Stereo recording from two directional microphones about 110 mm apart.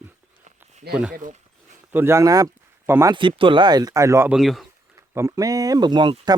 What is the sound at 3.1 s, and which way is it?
Speech, 50° right (ahead or behind).